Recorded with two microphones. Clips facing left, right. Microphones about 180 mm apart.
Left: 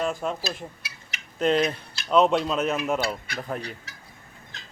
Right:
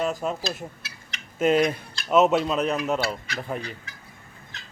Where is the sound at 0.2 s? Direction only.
5° right (ahead or behind).